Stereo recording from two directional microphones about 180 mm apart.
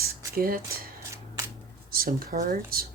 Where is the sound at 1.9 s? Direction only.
55° right (ahead or behind).